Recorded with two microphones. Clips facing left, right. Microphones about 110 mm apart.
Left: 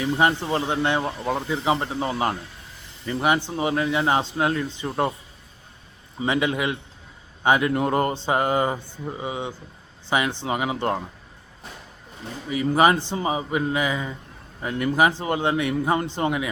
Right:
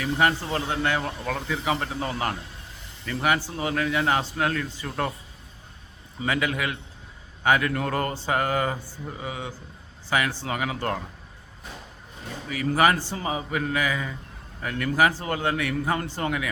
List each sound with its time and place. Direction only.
0.0 s speech: 25° left (ahead or behind)
6.1 s speech: 25° left (ahead or behind)
12.5 s speech: 20° left (ahead or behind)